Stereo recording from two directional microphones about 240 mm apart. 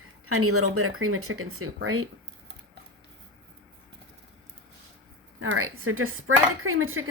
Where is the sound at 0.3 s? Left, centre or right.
Right.